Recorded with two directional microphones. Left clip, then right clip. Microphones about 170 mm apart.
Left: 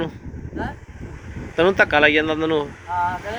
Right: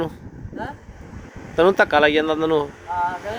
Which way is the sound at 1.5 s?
15° right (ahead or behind).